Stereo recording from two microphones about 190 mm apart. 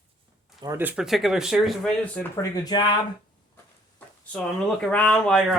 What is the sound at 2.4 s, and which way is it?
Speech, 20° left (ahead or behind).